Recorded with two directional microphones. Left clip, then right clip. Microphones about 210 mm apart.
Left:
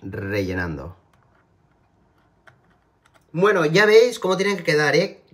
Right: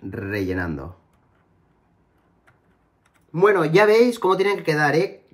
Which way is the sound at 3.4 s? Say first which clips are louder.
Right 1 dB; 20° right (ahead or behind).